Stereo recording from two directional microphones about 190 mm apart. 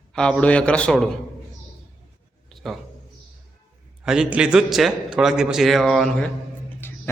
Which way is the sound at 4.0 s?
5° right (ahead or behind).